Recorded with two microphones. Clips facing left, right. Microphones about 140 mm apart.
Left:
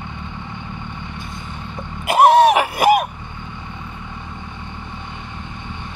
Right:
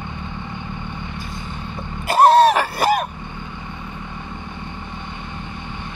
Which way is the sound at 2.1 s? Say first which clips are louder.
Left 1 dB; 15° left (ahead or behind).